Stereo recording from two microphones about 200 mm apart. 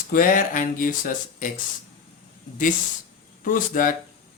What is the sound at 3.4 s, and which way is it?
Speech, 45° left (ahead or behind).